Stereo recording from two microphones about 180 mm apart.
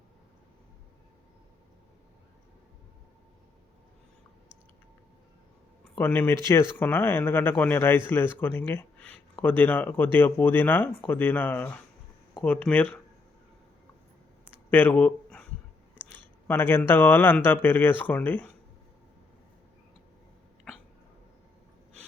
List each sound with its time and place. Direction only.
6.0 s speech: 10° left (ahead or behind)
14.4 s a sound: 10° left (ahead or behind)
16.5 s speech: 10° left (ahead or behind)